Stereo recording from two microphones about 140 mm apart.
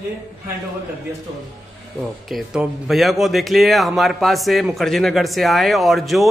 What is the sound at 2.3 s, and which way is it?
A man's voice, 5° right (ahead or behind).